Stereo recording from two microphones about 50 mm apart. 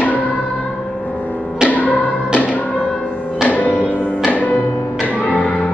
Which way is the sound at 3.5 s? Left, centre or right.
Left.